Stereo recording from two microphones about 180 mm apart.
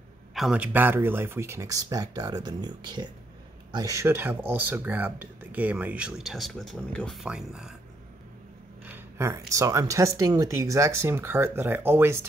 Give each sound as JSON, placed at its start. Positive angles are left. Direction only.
{"t": 0.3, "sound": "speech", "side_deg": -5}
{"t": 8.8, "sound": "speech", "side_deg": -15}